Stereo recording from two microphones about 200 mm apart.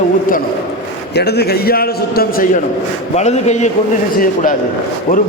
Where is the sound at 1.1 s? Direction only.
55° left (ahead or behind).